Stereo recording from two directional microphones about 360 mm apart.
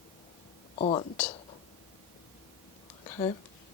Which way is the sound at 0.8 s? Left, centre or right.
Centre.